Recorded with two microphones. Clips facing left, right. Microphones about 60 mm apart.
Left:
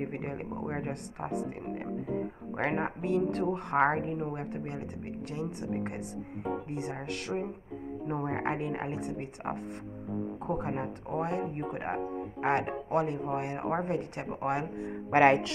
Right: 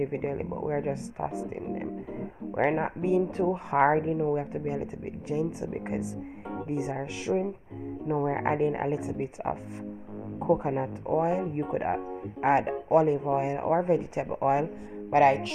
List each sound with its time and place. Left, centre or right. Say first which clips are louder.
0.0 s speech: right 6 dB; centre
8.4 s speech: right 6 dB; centre
15.0 s speech: right 2 dB; left